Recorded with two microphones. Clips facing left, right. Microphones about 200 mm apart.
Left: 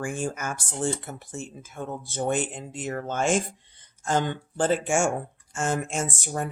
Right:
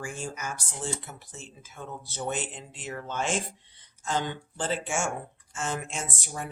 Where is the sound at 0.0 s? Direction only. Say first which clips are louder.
Left 6 dB; 50° left (ahead or behind).